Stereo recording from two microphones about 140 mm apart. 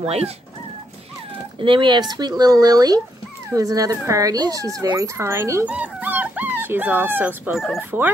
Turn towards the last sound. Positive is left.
turn(degrees=0)  # may be behind; listen again after turning